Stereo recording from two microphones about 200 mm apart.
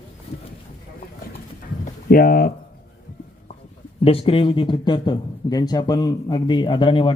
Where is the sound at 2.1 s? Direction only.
45° left (ahead or behind).